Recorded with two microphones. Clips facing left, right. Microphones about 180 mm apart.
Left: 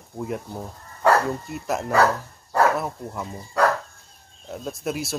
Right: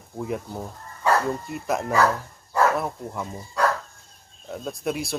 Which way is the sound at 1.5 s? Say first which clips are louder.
Right 1 dB; centre (ahead or behind).